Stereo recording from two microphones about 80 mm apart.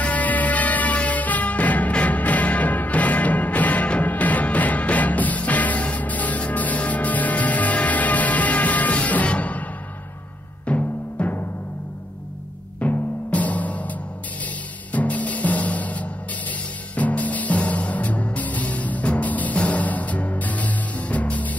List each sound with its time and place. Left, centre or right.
0.0 s music: centre
10.7 s music: centre
12.8 s music: centre